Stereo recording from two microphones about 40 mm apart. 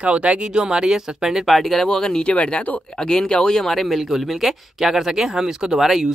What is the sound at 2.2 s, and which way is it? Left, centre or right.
Speech, left.